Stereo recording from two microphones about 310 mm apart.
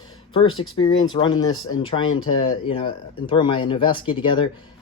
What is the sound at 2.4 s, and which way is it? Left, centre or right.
Speech, centre.